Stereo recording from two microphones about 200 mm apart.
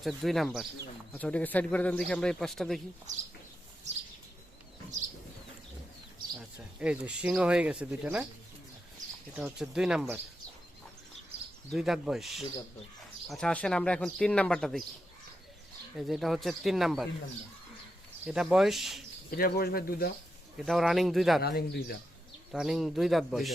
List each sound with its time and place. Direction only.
0.0 s speech: centre (ahead or behind)
6.7 s speech: 5° right (ahead or behind)
9.3 s speech: 5° right (ahead or behind)
11.7 s speech: centre (ahead or behind)
16.0 s speech: centre (ahead or behind)
18.3 s speech: centre (ahead or behind)
19.3 s speech: 50° left (ahead or behind)
20.6 s speech: centre (ahead or behind)
21.4 s speech: 55° left (ahead or behind)
22.5 s speech: centre (ahead or behind)